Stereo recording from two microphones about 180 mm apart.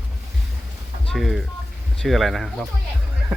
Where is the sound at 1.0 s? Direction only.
Centre (ahead or behind).